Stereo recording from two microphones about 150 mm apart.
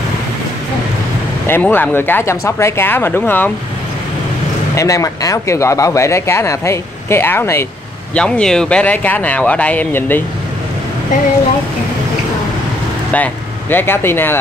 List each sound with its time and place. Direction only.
1.5 s speech: 15° left (ahead or behind)
4.7 s speech: 20° left (ahead or behind)
8.1 s speech: 5° left (ahead or behind)
13.1 s speech: 10° left (ahead or behind)